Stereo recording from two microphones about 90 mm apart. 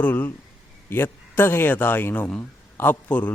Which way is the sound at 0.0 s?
20° left (ahead or behind).